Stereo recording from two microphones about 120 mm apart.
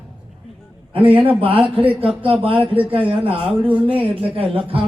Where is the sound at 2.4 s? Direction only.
50° right (ahead or behind).